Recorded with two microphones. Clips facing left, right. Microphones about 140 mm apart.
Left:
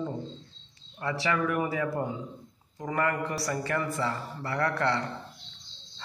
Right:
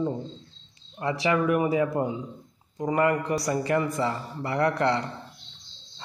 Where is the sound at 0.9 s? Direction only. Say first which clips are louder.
Right 4 dB; 20° right (ahead or behind).